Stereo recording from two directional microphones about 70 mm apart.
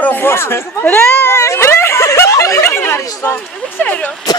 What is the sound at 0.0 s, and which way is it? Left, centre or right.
Speech, left.